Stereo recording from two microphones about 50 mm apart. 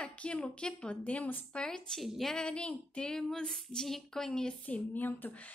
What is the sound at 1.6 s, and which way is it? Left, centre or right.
Speech, centre.